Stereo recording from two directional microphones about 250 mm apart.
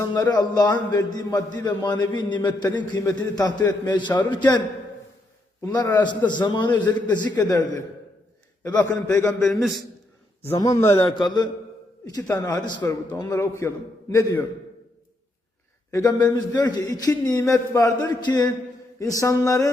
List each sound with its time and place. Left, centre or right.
0.0 s a man's voice: centre
5.6 s a man's voice: centre
8.6 s a man's voice: centre
15.9 s a man's voice: centre